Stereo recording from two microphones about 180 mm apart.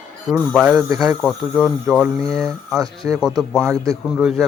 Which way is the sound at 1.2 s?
5° right (ahead or behind).